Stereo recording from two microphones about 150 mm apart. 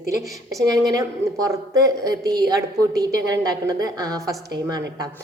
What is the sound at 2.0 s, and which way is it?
A woman's voice, 25° right (ahead or behind).